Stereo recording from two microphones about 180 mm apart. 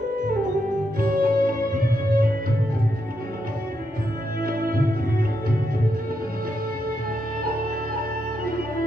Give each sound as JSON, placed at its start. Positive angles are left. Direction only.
{"t": 1.0, "sound": "music", "side_deg": -55}
{"t": 4.4, "sound": "music", "side_deg": -55}